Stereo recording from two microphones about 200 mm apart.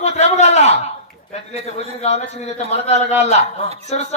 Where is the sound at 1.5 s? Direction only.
30° left (ahead or behind).